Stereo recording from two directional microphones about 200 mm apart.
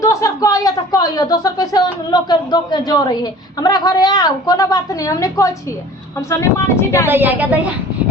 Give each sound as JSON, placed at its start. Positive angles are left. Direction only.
{"t": 0.0, "sound": "speech", "side_deg": 15}
{"t": 7.1, "sound": "a woman's voice", "side_deg": -10}